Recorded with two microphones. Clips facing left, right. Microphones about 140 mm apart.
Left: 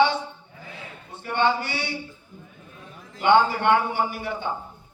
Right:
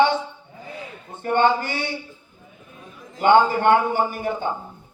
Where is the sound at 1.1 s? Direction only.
45° right (ahead or behind).